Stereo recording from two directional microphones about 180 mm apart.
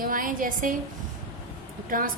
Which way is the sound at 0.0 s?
50° right (ahead or behind).